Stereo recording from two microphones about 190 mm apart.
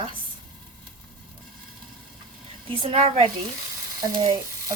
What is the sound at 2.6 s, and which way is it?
Speech, 30° right (ahead or behind).